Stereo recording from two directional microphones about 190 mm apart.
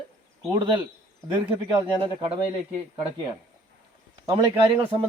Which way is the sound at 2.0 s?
30° right (ahead or behind).